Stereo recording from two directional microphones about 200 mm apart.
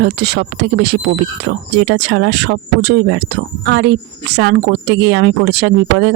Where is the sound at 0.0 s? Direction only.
55° right (ahead or behind).